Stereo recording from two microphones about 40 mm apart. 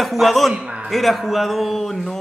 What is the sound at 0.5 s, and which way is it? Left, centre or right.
Speech, right.